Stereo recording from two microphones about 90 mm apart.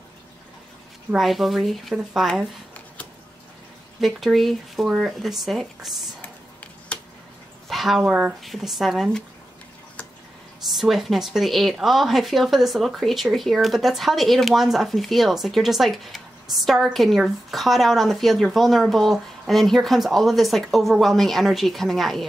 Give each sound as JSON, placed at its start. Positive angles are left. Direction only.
{"t": 1.1, "sound": "speech", "side_deg": 0}
{"t": 4.0, "sound": "speech", "side_deg": 0}
{"t": 6.2, "sound": "a sound", "side_deg": 15}
{"t": 7.6, "sound": "a sound", "side_deg": 0}
{"t": 8.0, "sound": "speech", "side_deg": -10}
{"t": 10.7, "sound": "speech", "side_deg": 0}